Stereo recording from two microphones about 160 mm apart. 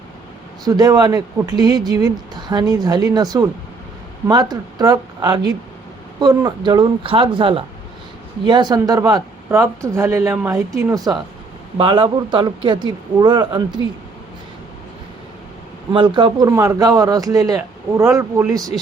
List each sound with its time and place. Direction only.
0.6 s speech: 25° right (ahead or behind)
15.9 s speech: 30° right (ahead or behind)